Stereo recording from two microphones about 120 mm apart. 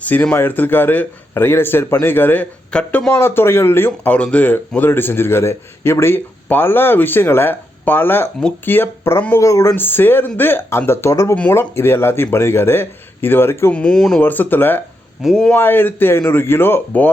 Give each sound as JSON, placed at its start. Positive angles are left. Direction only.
{"t": 0.0, "sound": "speech", "side_deg": 15}
{"t": 3.1, "sound": "speech", "side_deg": 20}
{"t": 11.3, "sound": "speech", "side_deg": 15}
{"t": 13.7, "sound": "speech", "side_deg": 5}
{"t": 15.2, "sound": "speech", "side_deg": -5}
{"t": 15.5, "sound": "speech", "side_deg": 15}